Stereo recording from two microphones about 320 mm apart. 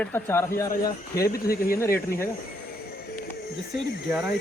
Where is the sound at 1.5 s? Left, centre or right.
Left.